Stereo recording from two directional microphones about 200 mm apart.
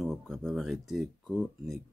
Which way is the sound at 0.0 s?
Centre (ahead or behind).